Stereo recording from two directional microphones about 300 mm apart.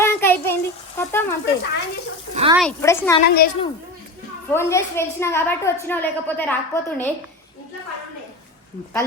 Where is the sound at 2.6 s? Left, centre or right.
Centre.